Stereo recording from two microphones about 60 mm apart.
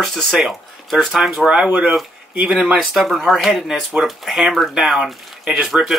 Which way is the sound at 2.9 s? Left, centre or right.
Centre.